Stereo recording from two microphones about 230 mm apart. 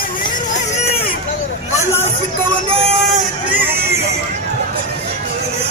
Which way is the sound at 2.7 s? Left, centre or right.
Right.